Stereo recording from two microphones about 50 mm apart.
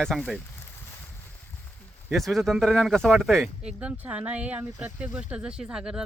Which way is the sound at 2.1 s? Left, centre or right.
Centre.